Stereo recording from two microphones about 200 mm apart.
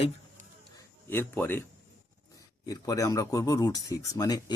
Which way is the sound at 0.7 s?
10° left (ahead or behind).